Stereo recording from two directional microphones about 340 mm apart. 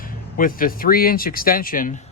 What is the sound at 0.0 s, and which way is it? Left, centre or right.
Speech, left.